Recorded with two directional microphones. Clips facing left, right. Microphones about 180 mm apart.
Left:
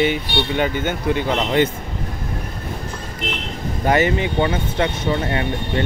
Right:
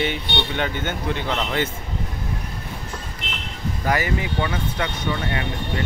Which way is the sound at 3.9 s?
25° left (ahead or behind).